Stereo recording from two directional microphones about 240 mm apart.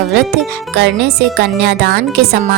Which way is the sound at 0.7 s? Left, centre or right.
Right.